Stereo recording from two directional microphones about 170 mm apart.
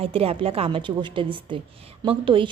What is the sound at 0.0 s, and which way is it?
A woman's voice, 35° right (ahead or behind).